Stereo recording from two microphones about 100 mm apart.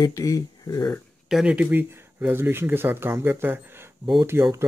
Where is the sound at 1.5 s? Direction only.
15° right (ahead or behind).